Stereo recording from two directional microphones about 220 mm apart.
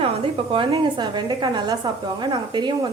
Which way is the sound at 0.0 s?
25° right (ahead or behind).